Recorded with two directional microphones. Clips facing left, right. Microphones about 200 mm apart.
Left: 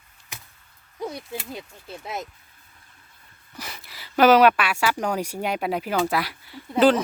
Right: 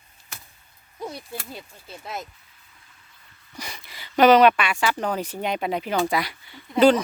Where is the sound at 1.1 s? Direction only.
15° left (ahead or behind).